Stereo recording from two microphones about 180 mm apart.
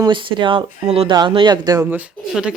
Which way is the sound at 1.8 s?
5° right (ahead or behind).